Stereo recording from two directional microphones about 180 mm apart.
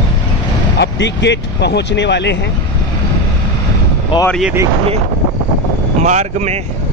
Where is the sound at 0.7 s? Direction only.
75° left (ahead or behind).